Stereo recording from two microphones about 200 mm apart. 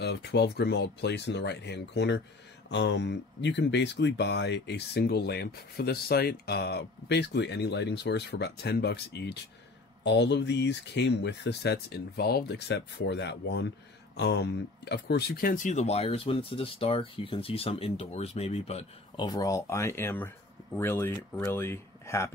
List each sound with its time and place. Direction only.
0.0 s speech: 55° left (ahead or behind); by 19.2 s 30° left (ahead or behind)
19.2 s speech: 20° left (ahead or behind)